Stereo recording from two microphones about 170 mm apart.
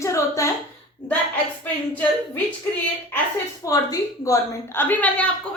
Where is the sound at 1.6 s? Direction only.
10° left (ahead or behind).